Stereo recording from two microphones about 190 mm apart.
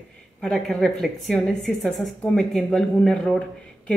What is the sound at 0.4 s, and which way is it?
A woman's voice, centre (ahead or behind).